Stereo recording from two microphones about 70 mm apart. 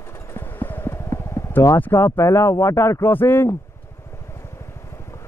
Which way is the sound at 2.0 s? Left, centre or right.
Left.